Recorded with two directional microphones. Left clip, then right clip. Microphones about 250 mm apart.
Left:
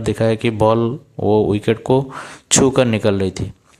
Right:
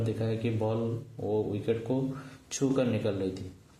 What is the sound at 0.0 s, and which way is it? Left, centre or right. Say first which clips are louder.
Speech: left 15 dB; left.